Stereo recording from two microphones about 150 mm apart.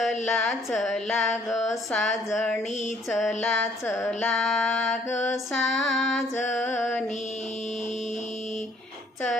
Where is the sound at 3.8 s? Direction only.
15° left (ahead or behind).